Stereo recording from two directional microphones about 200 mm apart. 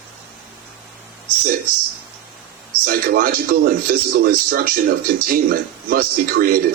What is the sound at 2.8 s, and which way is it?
A man's voice, 45° right (ahead or behind).